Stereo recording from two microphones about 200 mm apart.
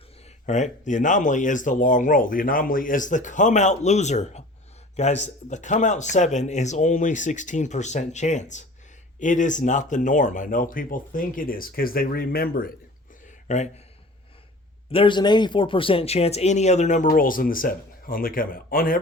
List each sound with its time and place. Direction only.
0.4 s speech: 35° left (ahead or behind)
13.5 s speech: 35° left (ahead or behind)
14.9 s speech: 25° left (ahead or behind); by 18.9 s 45° left (ahead or behind)